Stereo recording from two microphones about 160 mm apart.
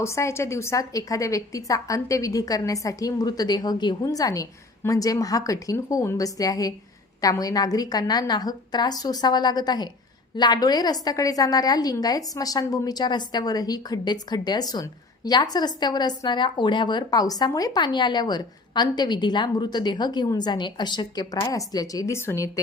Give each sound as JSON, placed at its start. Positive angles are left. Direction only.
{"t": 0.0, "sound": "a woman's voice", "side_deg": 15}